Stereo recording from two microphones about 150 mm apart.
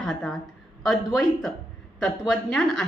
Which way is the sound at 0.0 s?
5° left (ahead or behind).